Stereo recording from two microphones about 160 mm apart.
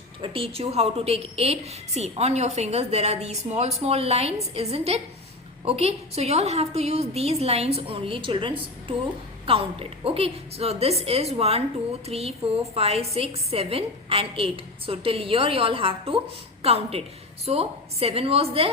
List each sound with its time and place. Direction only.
0.2 s a woman's voice: 35° right (ahead or behind)